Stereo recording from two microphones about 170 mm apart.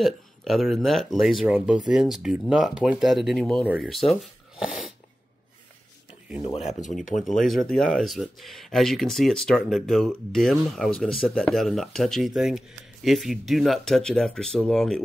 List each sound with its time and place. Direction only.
0.0 s speech: centre (ahead or behind)
6.4 s speech: 40° left (ahead or behind)
7.4 s speech: centre (ahead or behind)